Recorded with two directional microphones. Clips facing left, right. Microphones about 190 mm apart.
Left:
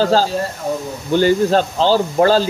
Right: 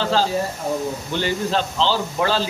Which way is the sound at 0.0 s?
40° left (ahead or behind).